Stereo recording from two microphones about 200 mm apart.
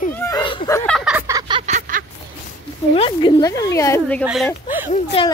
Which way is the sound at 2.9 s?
25° left (ahead or behind).